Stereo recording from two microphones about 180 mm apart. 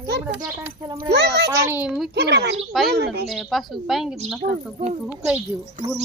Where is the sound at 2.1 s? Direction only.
65° right (ahead or behind).